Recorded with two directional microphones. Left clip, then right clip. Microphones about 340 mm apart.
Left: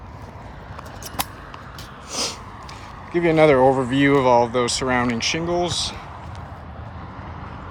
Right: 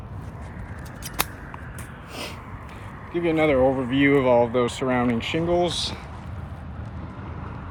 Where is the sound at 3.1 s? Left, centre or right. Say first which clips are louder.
Left 5 dB; centre.